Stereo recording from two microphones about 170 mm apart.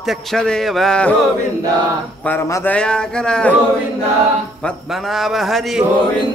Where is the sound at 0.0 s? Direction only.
Centre (ahead or behind).